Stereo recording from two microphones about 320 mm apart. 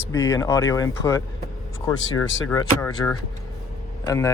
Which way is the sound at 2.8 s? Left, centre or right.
Centre.